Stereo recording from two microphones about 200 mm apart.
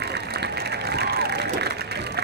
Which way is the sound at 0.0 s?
55° right (ahead or behind).